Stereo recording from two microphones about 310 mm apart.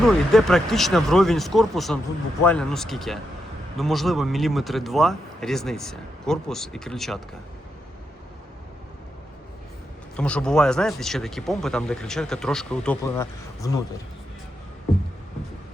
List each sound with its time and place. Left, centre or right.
0.0 s speech: centre
10.2 s speech: centre